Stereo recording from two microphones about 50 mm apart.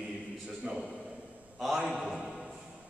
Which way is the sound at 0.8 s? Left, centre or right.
Centre.